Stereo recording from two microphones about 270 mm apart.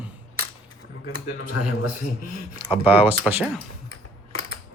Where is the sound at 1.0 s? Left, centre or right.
Left.